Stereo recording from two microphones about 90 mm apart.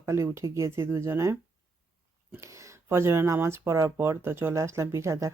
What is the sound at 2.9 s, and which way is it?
Speech, 30° right (ahead or behind).